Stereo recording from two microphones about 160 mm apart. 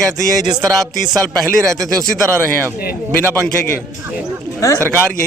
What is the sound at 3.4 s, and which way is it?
A man's voice, 10° left (ahead or behind).